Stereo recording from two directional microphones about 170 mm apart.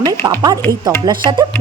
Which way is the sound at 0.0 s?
25° right (ahead or behind).